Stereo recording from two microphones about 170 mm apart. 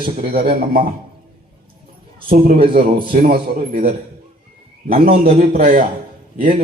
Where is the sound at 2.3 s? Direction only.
55° right (ahead or behind).